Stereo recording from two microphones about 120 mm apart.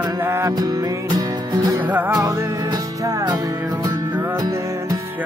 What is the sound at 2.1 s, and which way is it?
Music, 30° right (ahead or behind).